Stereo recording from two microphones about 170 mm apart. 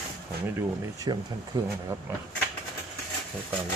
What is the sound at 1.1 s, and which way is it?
Speech, 25° right (ahead or behind).